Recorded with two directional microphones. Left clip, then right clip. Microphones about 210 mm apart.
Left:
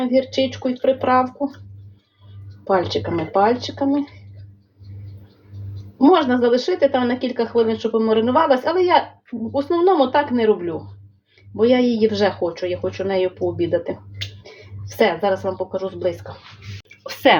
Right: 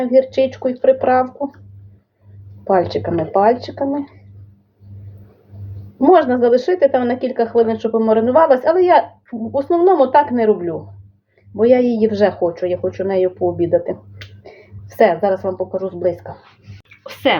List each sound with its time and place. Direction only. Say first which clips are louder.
0.0 s speech: right 5 dB; 5° right (ahead or behind)
2.6 s speech: right 3 dB; 5° right (ahead or behind)
6.0 s a woman's voice: right 3 dB; 5° right (ahead or behind)
17.0 s a sound: left 2 dB; 5° left (ahead or behind)